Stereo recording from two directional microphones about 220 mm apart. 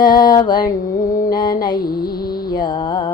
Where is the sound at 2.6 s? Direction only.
20° left (ahead or behind).